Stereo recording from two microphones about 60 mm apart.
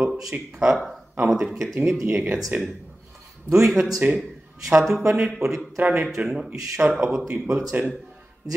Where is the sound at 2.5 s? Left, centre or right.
Right.